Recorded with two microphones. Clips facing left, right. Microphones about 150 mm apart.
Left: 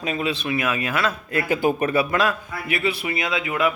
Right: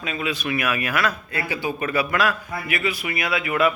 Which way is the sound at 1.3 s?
50° left (ahead or behind).